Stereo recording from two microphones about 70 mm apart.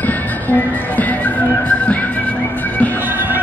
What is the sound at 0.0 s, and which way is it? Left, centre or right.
Music, left.